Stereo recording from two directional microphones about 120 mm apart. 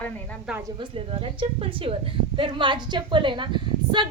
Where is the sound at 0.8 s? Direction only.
50° right (ahead or behind).